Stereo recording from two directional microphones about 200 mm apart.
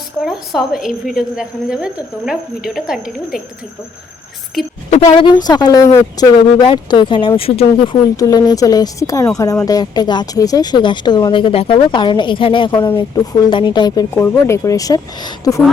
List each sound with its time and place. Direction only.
0.3 s a woman's voice: centre (ahead or behind)
4.9 s speech: 35° left (ahead or behind)
8.1 s speech: 20° left (ahead or behind)